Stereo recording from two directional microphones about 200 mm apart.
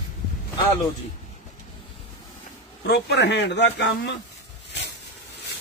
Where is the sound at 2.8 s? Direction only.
55° left (ahead or behind).